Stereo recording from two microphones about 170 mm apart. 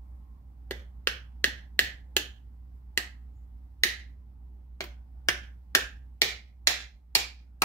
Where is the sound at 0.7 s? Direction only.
10° left (ahead or behind).